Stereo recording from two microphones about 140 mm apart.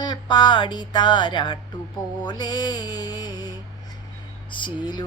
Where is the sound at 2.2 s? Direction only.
30° left (ahead or behind).